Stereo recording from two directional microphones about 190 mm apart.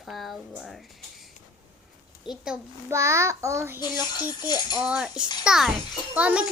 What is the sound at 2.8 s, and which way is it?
Speech, 15° right (ahead or behind).